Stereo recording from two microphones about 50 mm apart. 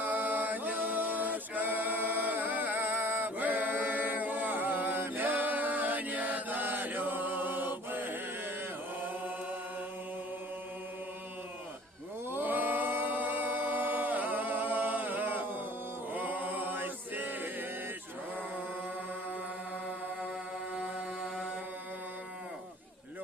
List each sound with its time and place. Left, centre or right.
0.0 s music: right
9.0 s chant: right
12.3 s a capella: right
16.1 s chant: right